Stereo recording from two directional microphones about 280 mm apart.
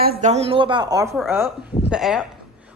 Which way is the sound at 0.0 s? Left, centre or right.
Right.